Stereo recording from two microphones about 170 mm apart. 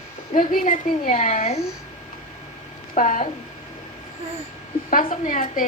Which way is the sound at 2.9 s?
50° left (ahead or behind).